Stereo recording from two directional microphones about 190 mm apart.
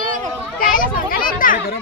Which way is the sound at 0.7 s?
50° left (ahead or behind).